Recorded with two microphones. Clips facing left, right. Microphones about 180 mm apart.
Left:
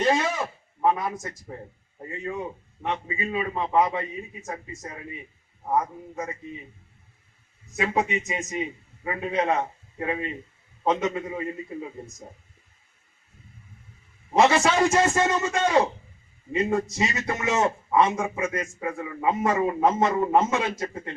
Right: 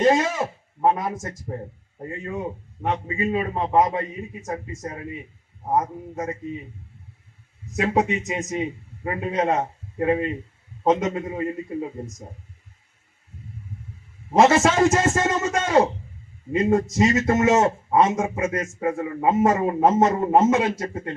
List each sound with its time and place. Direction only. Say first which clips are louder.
0.1 s a sound: right 3 dB; 40° right (ahead or behind)
0.9 s a man's voice: right 2 dB; 45° right (ahead or behind)
7.8 s a man's voice: right 4 dB; 40° right (ahead or behind)
14.3 s a man's voice: right 3 dB; 45° right (ahead or behind)